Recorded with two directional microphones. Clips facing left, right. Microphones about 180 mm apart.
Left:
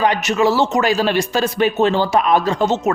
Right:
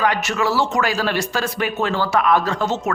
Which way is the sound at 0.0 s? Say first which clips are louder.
Left 4 dB; 20° left (ahead or behind).